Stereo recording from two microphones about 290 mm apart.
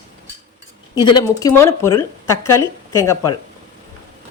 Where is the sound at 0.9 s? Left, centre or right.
Centre.